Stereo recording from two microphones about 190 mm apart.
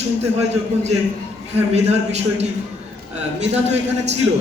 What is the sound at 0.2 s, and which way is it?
A man's voice, 35° right (ahead or behind).